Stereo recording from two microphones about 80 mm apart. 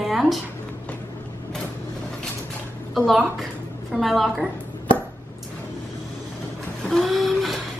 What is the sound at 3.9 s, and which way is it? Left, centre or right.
Speech, centre.